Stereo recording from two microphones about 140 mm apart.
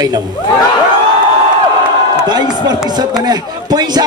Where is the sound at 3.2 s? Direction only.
30° right (ahead or behind).